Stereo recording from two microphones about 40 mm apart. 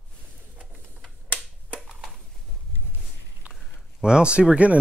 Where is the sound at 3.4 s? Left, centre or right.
Right.